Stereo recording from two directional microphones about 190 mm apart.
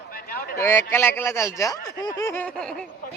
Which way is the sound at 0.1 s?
50° left (ahead or behind).